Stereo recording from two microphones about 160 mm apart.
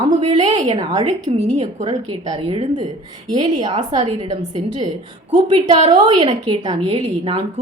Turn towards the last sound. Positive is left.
turn(degrees=-35)  # may be behind; listen again after turning